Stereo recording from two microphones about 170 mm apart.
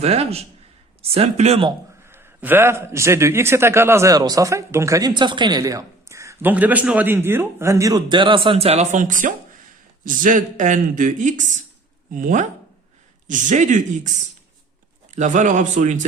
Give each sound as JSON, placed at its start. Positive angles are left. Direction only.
{"t": 0.0, "sound": "speech", "side_deg": -35}
{"t": 2.0, "sound": "a man's voice", "side_deg": -15}
{"t": 15.1, "sound": "speech", "side_deg": -45}